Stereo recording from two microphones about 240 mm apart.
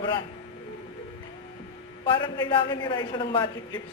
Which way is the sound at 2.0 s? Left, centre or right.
Left.